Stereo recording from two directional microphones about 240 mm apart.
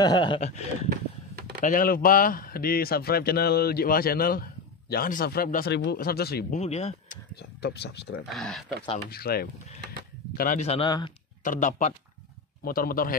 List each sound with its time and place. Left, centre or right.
0.0 s speech: centre
0.8 s a sound: right
1.6 s a man's voice: left
6.6 s speech: left
7.3 s speech: left
8.3 s speech: centre
9.1 s a man's voice: left; by 11.1 s centre
11.4 s a man's voice: left